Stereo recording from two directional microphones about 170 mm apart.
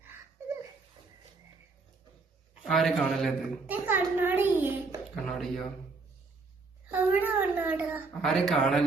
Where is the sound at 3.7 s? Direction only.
10° right (ahead or behind).